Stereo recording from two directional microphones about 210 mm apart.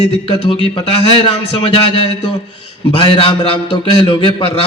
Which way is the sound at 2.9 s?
25° left (ahead or behind).